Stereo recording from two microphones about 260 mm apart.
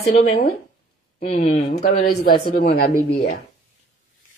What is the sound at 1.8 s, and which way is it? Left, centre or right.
Speech, left.